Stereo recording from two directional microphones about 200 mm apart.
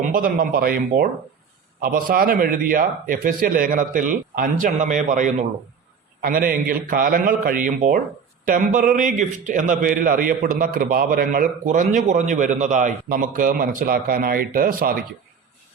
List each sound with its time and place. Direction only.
0.0 s a man's voice: 40° right (ahead or behind)